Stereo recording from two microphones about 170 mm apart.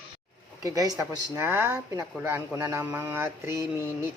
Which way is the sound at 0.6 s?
20° right (ahead or behind).